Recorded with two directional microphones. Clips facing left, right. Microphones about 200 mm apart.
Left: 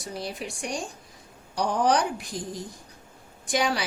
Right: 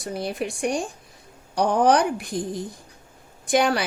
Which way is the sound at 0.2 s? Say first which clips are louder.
Right 8 dB; 55° right (ahead or behind).